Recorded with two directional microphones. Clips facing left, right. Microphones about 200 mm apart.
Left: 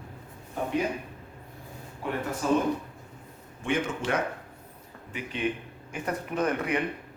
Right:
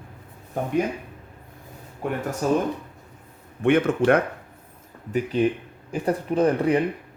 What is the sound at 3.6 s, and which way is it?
Speech, 60° right (ahead or behind).